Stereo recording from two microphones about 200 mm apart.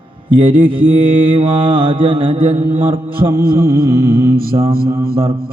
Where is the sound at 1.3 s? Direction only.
25° right (ahead or behind).